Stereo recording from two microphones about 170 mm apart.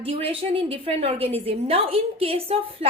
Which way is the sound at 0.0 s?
35° right (ahead or behind).